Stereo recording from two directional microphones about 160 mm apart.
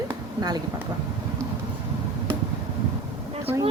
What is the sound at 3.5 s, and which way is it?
Speech, 35° right (ahead or behind).